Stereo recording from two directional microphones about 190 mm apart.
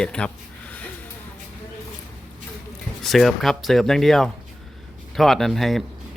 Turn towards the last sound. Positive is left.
turn(degrees=0)  # may be behind; listen again after turning